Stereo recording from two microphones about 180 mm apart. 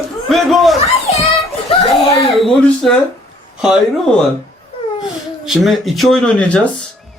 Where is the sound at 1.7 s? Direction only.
30° left (ahead or behind).